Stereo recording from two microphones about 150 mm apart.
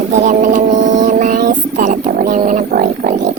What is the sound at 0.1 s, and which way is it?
Music, 50° right (ahead or behind).